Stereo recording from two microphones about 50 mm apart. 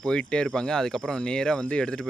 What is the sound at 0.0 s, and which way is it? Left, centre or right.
Speech, centre.